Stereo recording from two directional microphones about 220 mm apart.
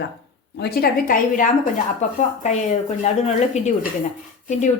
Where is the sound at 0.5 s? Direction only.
45° left (ahead or behind).